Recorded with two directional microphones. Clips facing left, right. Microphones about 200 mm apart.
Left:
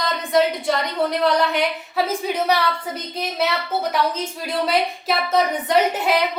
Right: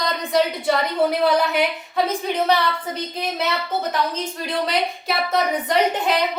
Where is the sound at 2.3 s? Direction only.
10° left (ahead or behind).